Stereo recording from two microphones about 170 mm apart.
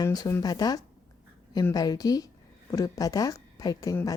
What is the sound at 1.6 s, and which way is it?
A woman's voice, 20° left (ahead or behind).